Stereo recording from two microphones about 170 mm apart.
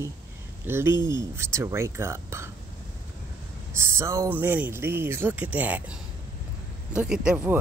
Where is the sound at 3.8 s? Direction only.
15° right (ahead or behind).